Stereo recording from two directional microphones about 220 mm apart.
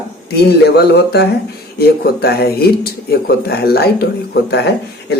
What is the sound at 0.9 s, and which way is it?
Speech, 50° left (ahead or behind).